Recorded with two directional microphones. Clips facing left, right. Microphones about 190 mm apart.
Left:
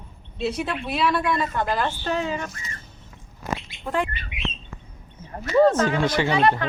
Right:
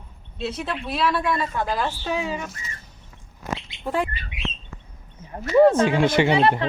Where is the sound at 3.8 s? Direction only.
10° right (ahead or behind).